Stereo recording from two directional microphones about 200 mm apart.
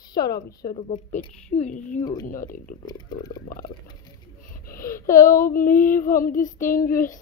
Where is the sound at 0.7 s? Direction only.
35° left (ahead or behind).